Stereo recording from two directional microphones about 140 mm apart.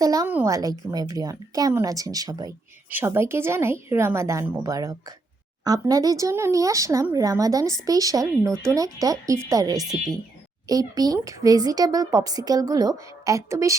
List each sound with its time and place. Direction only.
0.0 s speech: 25° right (ahead or behind)